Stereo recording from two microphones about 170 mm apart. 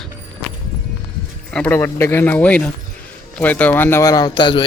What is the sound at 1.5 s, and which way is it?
Speech, 10° left (ahead or behind).